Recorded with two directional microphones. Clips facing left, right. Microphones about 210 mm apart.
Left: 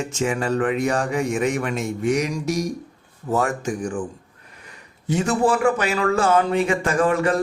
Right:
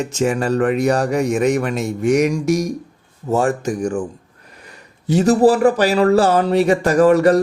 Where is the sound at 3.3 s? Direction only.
35° right (ahead or behind).